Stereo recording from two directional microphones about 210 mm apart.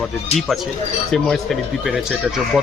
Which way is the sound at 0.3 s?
Centre (ahead or behind).